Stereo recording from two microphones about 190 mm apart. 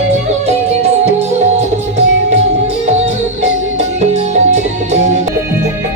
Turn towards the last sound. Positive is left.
turn(degrees=-35)  # may be behind; listen again after turning